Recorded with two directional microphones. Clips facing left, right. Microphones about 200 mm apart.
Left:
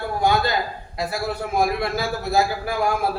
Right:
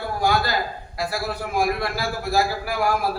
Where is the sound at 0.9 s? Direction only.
20° left (ahead or behind).